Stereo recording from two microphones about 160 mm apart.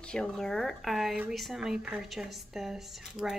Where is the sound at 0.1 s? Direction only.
5° left (ahead or behind).